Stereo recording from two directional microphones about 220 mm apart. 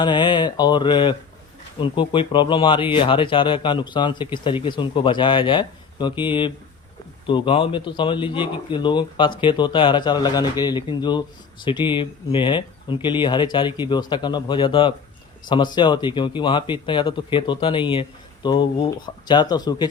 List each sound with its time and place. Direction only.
0.0 s speech: 20° left (ahead or behind)